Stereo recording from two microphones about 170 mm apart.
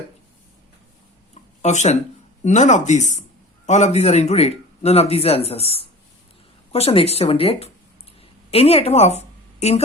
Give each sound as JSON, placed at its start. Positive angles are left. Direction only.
{"t": 1.3, "sound": "a sound", "side_deg": 45}
{"t": 2.4, "sound": "speech", "side_deg": 45}
{"t": 6.7, "sound": "a woman's voice", "side_deg": 35}